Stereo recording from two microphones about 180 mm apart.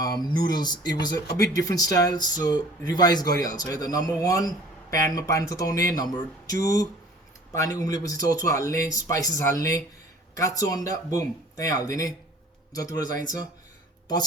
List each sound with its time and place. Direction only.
0.2 s speech: 25° left (ahead or behind)